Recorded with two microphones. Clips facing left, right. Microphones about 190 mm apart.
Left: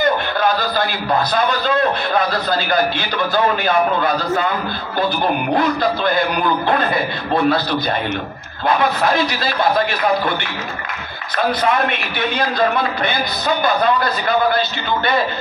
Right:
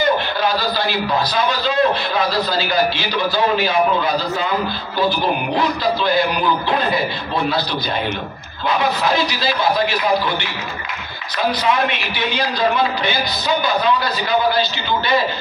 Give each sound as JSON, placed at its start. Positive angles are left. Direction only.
{"t": 0.4, "sound": "a man's voice", "side_deg": 50}
{"t": 11.3, "sound": "a man's voice", "side_deg": 50}